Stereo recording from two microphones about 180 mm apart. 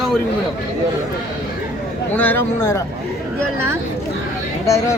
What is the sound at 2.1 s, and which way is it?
Speech, 10° left (ahead or behind).